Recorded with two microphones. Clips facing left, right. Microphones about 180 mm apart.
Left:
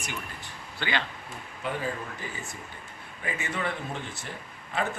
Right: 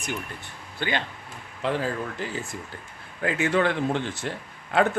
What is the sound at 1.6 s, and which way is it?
Speech, 90° right.